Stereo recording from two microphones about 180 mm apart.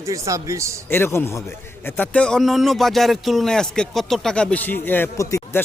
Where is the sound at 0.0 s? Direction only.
15° right (ahead or behind).